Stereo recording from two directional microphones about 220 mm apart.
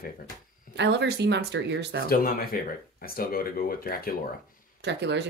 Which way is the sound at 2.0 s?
40° left (ahead or behind).